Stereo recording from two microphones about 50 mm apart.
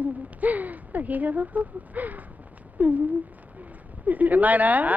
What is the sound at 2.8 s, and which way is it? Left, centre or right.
Speech, right.